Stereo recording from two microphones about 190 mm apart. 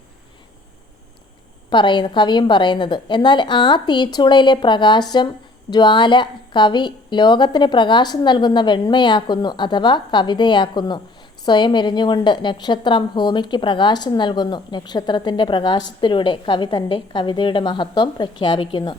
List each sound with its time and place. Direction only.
1.7 s a woman's voice: 25° left (ahead or behind)